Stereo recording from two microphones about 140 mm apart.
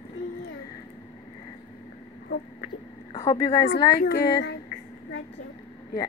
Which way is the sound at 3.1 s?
25° left (ahead or behind).